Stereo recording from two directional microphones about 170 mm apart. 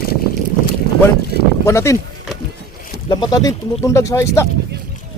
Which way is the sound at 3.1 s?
20° left (ahead or behind).